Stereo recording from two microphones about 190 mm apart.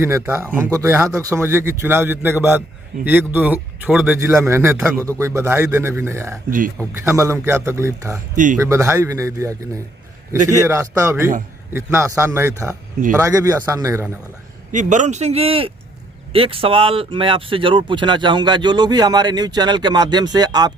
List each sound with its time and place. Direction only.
0.0 s a man's voice: 15° right (ahead or behind)
10.3 s speech: 40° right (ahead or behind)
10.7 s a man's voice: 15° right (ahead or behind)
14.7 s speech: 40° right (ahead or behind); by 20.7 s 20° right (ahead or behind)